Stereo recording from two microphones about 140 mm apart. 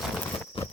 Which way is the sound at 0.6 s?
40° left (ahead or behind).